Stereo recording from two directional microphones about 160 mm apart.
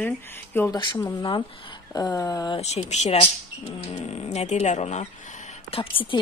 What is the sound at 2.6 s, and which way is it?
A woman's voice, 45° left (ahead or behind).